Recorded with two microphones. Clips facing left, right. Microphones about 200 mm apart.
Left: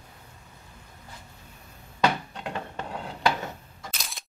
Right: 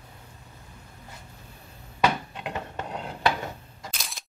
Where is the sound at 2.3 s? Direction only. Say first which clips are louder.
Even; 20° right (ahead or behind).